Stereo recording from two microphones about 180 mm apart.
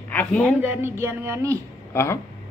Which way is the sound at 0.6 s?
10° right (ahead or behind).